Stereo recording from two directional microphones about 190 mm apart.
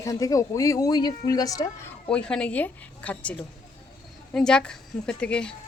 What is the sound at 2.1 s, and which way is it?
Speech, 5° left (ahead or behind).